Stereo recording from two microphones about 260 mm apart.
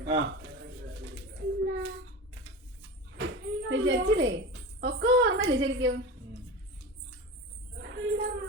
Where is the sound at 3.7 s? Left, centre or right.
Right.